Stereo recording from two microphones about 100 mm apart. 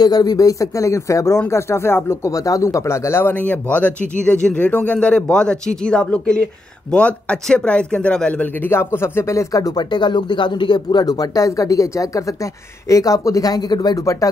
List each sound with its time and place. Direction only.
0.0 s speech: 40° left (ahead or behind); by 2.3 s 25° left (ahead or behind)
2.3 s speech: 35° left (ahead or behind)